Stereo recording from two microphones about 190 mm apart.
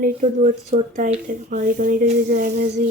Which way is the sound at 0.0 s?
40° right (ahead or behind).